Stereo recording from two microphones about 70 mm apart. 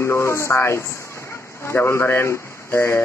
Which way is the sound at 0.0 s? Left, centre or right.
Left.